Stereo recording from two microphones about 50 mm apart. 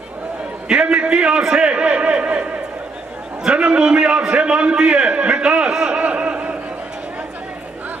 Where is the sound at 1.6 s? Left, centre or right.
Right.